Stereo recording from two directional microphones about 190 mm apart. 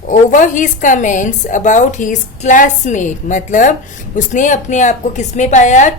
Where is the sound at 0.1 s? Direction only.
40° left (ahead or behind).